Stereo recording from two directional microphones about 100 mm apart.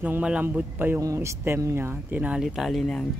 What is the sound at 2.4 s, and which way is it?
Speech, centre (ahead or behind).